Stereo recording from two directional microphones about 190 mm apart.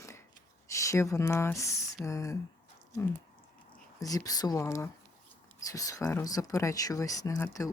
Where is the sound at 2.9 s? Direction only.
15° left (ahead or behind).